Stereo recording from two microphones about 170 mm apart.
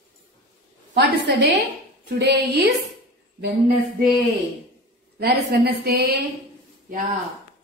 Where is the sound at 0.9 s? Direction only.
90° right.